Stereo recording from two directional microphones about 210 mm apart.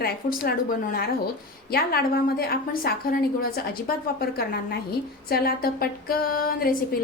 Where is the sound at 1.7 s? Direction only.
45° left (ahead or behind).